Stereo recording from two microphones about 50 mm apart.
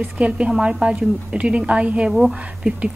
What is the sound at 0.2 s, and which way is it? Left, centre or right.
Speech, right.